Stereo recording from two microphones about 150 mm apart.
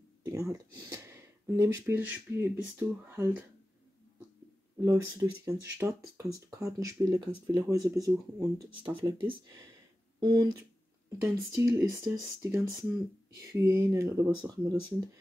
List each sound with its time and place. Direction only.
0.2 s speech: 20° right (ahead or behind)
4.7 s speech: 20° right (ahead or behind)
8.6 s speech: 35° right (ahead or behind)